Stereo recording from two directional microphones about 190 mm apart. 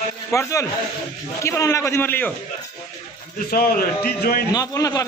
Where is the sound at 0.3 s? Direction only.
15° left (ahead or behind).